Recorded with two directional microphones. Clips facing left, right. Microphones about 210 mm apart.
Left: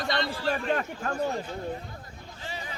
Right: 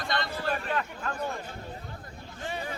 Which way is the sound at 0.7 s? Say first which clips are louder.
Left 4 dB; 45° left (ahead or behind).